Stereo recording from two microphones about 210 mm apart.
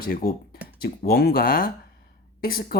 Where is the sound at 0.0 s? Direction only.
45° left (ahead or behind).